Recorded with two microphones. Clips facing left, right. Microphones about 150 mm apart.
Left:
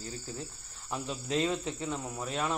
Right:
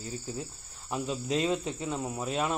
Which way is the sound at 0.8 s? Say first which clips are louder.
Right 4 dB; 15° right (ahead or behind).